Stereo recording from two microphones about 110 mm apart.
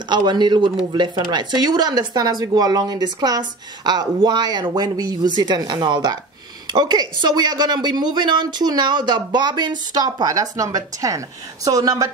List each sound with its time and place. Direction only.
0.1 s speech: 45° right (ahead or behind)